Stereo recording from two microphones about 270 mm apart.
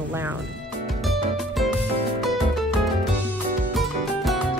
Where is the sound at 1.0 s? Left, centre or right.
Centre.